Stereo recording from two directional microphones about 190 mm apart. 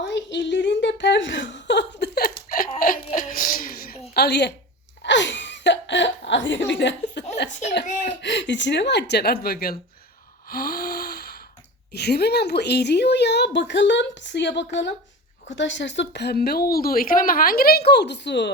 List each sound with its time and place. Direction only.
0.0 s a sound: 65° left (ahead or behind)
2.7 s music: 45° left (ahead or behind)
4.1 s a woman's voice: 60° left (ahead or behind)
5.0 s a sound: 70° left (ahead or behind)
7.9 s speech: 40° left (ahead or behind)
8.2 s speech: 65° left (ahead or behind)
10.5 s gasp: 50° left (ahead or behind)
11.9 s speech: 60° left (ahead or behind)